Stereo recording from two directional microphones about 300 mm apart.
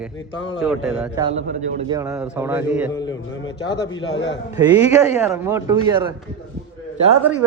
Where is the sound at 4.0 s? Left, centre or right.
Left.